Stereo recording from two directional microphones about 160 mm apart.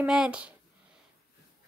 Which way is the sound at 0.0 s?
5° right (ahead or behind).